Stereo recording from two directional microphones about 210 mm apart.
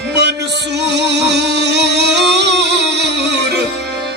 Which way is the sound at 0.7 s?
55° right (ahead or behind).